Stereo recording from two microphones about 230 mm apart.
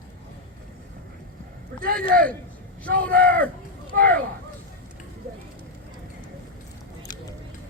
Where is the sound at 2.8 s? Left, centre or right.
Centre.